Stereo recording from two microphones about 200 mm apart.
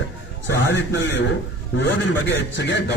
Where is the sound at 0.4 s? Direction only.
65° left (ahead or behind).